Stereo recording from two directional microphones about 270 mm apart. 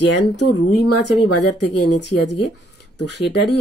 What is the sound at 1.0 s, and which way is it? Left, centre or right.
Speech, left.